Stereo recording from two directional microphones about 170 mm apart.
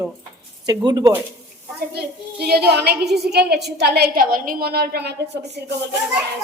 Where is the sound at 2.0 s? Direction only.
70° right (ahead or behind).